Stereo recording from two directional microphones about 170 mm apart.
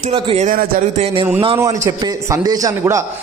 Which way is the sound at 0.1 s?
30° right (ahead or behind).